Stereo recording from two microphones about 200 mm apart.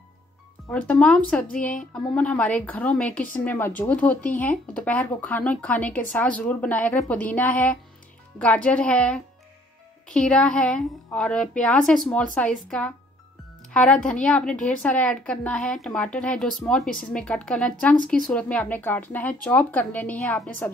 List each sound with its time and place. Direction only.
0.7 s a woman's voice: 5° left (ahead or behind)